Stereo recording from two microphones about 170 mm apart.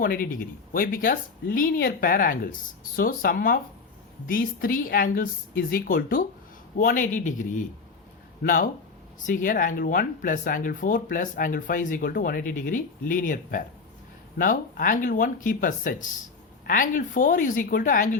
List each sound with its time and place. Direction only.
0.0 s speech: 60° left (ahead or behind)